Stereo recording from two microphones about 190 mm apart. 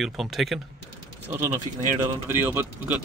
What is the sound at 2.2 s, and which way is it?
Speech, 10° right (ahead or behind).